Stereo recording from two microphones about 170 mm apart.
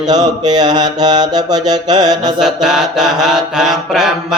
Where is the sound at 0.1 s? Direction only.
25° right (ahead or behind).